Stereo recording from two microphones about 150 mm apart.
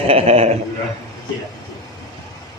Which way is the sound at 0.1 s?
40° right (ahead or behind).